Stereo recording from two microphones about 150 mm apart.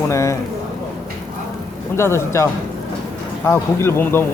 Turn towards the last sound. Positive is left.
turn(degrees=15)  # may be behind; listen again after turning